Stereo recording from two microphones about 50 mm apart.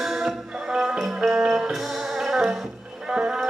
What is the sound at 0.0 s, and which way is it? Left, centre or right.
Music, centre.